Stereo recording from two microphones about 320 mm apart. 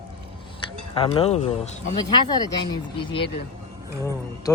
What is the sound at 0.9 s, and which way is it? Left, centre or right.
Speech, centre.